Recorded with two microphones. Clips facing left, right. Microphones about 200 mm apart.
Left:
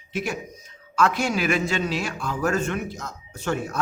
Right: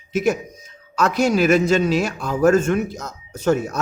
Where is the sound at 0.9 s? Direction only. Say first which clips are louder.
Right 5 dB; 40° right (ahead or behind).